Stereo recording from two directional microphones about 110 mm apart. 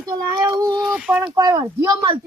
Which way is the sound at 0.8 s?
10° right (ahead or behind).